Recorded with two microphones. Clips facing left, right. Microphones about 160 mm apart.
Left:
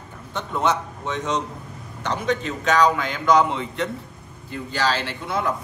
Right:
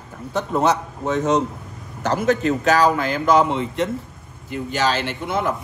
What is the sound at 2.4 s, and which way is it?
A man's voice, 40° right (ahead or behind).